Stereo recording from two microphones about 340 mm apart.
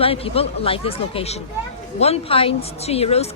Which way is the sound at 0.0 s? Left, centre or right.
Centre.